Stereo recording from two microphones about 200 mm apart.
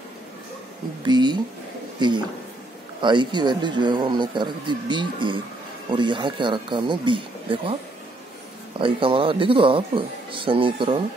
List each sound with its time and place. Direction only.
1.0 s a man's voice: 20° right (ahead or behind)
8.7 s a man's voice: 25° right (ahead or behind)